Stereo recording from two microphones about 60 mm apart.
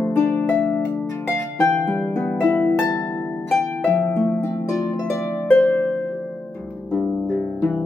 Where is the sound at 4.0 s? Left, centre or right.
Left.